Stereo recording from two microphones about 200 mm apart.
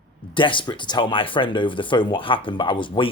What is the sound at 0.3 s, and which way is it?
Speech, 25° left (ahead or behind).